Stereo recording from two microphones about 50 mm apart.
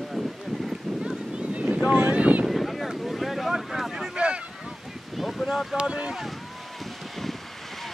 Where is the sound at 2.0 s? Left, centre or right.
Right.